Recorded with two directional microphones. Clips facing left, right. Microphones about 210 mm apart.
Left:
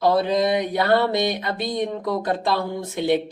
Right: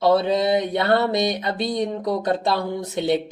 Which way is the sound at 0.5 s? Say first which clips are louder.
Even; 25° right (ahead or behind).